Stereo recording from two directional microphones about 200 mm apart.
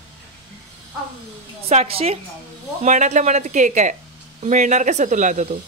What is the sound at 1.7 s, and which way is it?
A woman's voice, 30° right (ahead or behind).